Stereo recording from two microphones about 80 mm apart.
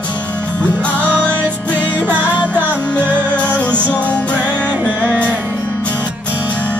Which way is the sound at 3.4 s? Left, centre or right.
Centre.